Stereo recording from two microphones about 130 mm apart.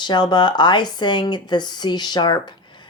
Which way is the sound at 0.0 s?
35° left (ahead or behind).